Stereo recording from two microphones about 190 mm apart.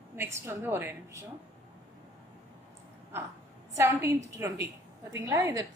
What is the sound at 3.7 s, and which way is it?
A woman's voice, 15° right (ahead or behind).